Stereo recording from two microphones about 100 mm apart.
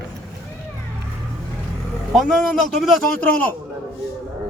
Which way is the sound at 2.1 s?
Centre (ahead or behind).